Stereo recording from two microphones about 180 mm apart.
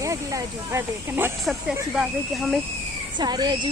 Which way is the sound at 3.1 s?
25° right (ahead or behind).